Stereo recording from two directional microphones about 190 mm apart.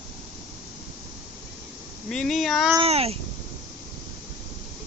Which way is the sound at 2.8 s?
30° right (ahead or behind).